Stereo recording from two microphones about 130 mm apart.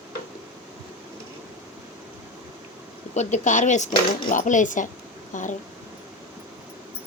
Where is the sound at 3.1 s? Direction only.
65° left (ahead or behind).